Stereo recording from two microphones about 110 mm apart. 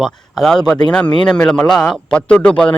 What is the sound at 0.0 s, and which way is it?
Speech, 5° left (ahead or behind).